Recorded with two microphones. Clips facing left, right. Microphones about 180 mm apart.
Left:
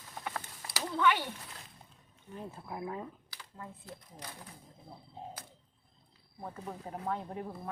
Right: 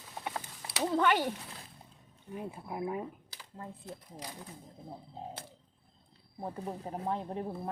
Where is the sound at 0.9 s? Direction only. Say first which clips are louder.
Right 2 dB; 40° right (ahead or behind).